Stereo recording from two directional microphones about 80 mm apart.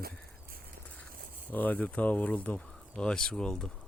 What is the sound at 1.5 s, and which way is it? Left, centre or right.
Speech, left.